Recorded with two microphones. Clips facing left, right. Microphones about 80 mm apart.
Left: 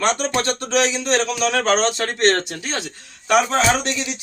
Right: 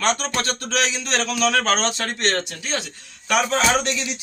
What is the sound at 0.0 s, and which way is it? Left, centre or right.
Speech, left.